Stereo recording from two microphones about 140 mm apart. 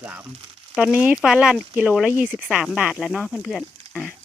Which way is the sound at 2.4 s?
Centre (ahead or behind).